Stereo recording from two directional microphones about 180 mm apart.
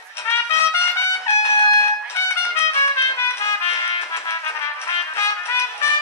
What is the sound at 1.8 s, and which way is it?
Music, 15° left (ahead or behind).